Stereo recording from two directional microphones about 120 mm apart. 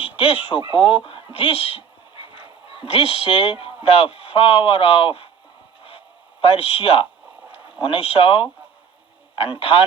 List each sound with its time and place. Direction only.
0.7 s speech: 50° left (ahead or behind)
2.8 s speech: 55° left (ahead or behind)
6.4 s speech: 55° left (ahead or behind)